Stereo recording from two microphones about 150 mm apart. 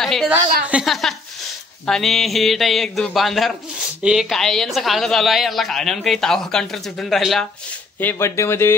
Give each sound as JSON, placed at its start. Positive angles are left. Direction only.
{"t": 0.0, "sound": "a woman's voice", "side_deg": 0}
{"t": 8.0, "sound": "speech", "side_deg": 15}